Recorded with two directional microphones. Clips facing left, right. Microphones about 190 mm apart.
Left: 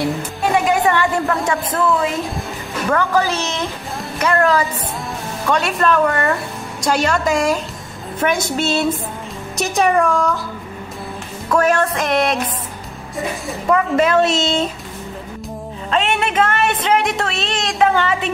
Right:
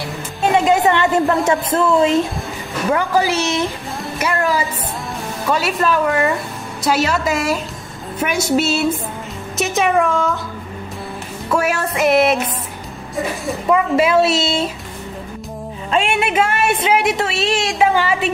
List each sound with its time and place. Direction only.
0.4 s music: 20° right (ahead or behind)
2.9 s a woman's voice: 15° right (ahead or behind)
11.4 s a woman's voice: 10° right (ahead or behind)
15.9 s a woman's voice: 10° right (ahead or behind)